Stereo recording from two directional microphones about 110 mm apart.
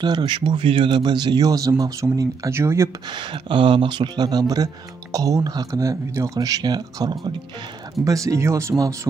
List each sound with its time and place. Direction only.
0.0 s speech: 40° right (ahead or behind); by 2.9 s 25° right (ahead or behind)
3.2 s speech: 50° right (ahead or behind)
8.0 s speech: 30° right (ahead or behind)